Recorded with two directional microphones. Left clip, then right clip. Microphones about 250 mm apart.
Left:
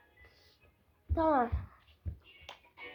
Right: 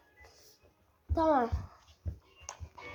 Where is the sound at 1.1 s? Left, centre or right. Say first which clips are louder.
Right 1 dB; centre.